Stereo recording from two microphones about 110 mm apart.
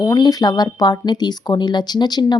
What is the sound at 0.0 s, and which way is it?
Speech, 35° left (ahead or behind).